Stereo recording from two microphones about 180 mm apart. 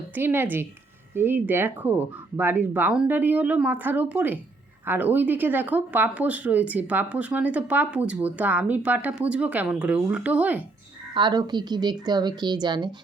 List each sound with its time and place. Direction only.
0.1 s speech: 10° right (ahead or behind)
11.1 s a woman's voice: 25° right (ahead or behind)